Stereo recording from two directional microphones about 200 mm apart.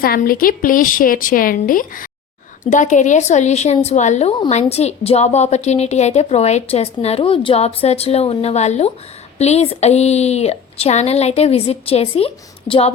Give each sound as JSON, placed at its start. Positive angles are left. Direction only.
{"t": 0.0, "sound": "a woman's voice", "side_deg": 45}